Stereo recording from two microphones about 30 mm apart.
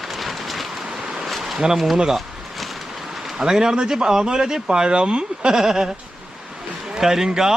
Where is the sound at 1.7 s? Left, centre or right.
Centre.